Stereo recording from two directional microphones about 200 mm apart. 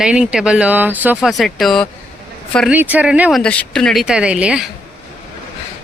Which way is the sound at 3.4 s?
5° left (ahead or behind).